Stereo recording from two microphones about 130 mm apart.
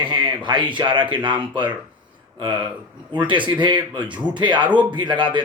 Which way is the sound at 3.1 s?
35° right (ahead or behind).